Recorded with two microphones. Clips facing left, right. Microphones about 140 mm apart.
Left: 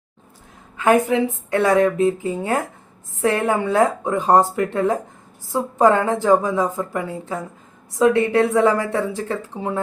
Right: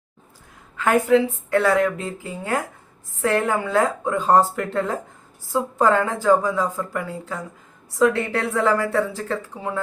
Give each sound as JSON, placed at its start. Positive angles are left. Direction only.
{"t": 0.8, "sound": "a woman's voice", "side_deg": 15}